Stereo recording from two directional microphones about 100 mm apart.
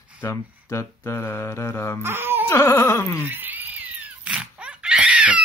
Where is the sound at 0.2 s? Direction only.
30° left (ahead or behind).